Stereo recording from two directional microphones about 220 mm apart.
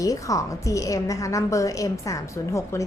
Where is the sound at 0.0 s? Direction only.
15° left (ahead or behind).